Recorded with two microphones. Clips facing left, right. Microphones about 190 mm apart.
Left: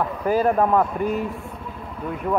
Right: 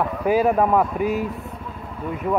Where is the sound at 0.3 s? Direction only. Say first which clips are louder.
Right 1 dB; 5° right (ahead or behind).